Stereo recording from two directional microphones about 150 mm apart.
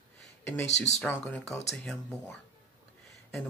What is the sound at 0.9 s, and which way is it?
Speech, 50° left (ahead or behind).